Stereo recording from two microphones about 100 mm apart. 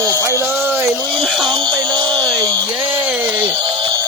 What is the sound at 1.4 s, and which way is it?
Music, 50° right (ahead or behind).